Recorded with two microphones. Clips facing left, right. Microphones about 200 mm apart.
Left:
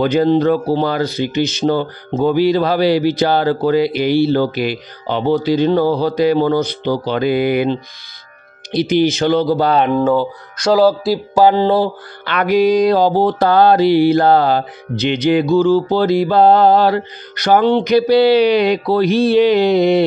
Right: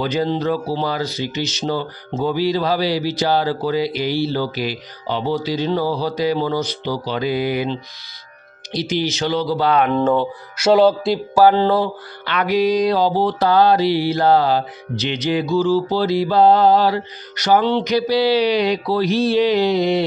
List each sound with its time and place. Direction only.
0.0 s speech: 55° left (ahead or behind)
9.9 s speech: centre (ahead or behind)
11.3 s speech: 20° left (ahead or behind)
12.3 s speech: 50° left (ahead or behind)